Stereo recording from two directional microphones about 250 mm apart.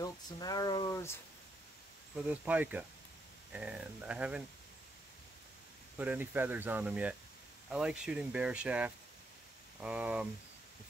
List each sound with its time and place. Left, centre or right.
0.0 s speech: centre
2.2 s speech: centre
5.9 s speech: centre